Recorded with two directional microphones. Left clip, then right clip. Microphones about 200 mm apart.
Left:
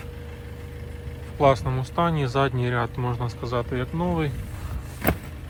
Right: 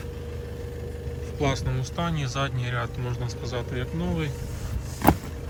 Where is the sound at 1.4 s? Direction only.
15° left (ahead or behind).